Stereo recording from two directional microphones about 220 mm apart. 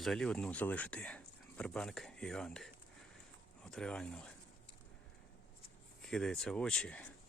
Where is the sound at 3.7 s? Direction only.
5° left (ahead or behind).